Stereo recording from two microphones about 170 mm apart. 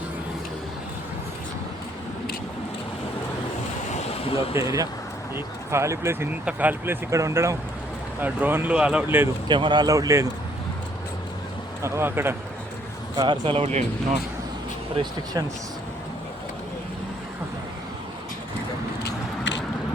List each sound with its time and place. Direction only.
3.9 s vehicle: 35° left (ahead or behind)
4.5 s speech: 20° right (ahead or behind)
9.5 s speech: 25° right (ahead or behind)
11.8 s speech: 15° right (ahead or behind)
13.1 s speech: 25° right (ahead or behind)
15.0 s speech: 35° right (ahead or behind)
19.0 s a sound: 90° left